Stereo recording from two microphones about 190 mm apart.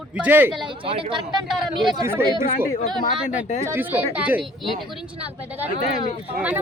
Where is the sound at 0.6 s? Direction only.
25° right (ahead or behind).